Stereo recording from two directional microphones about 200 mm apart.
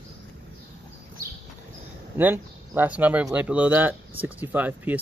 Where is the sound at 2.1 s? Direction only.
10° right (ahead or behind).